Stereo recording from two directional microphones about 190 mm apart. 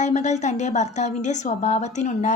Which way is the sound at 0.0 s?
35° left (ahead or behind).